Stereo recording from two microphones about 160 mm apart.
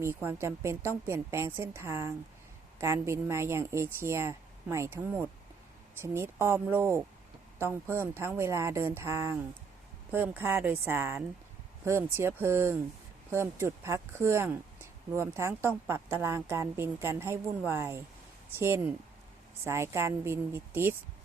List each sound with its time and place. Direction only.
0.0 s speech: 15° right (ahead or behind)